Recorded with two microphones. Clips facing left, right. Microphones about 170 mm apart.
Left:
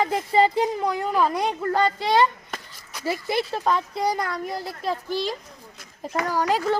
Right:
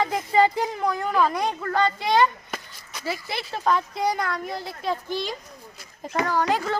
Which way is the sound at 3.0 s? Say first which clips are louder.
Left 6 dB; 45° left (ahead or behind).